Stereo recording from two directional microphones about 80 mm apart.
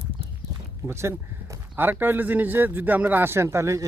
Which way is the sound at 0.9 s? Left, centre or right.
Right.